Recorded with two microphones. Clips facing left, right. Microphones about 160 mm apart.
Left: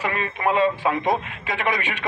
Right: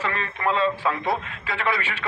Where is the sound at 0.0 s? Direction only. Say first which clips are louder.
Left 2 dB; 15° left (ahead or behind).